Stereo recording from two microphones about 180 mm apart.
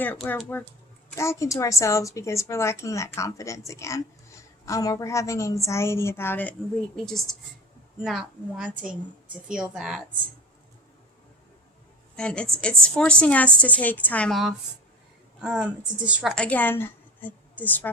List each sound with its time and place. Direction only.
0.0 s a woman's voice: 10° left (ahead or behind)
12.1 s a woman's voice: 5° left (ahead or behind)